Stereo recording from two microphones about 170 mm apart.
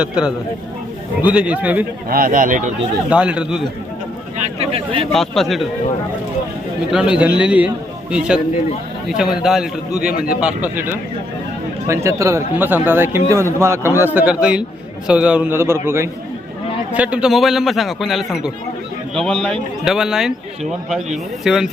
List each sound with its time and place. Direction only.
0.0 s a man's voice: 5° right (ahead or behind)
2.0 s speech: 55° right (ahead or behind)
3.1 s a man's voice: 5° right (ahead or behind)
4.6 s a sound: 35° right (ahead or behind)
5.1 s a man's voice: centre (ahead or behind)
6.9 s a man's voice: 5° right (ahead or behind)
21.4 s a man's voice: centre (ahead or behind)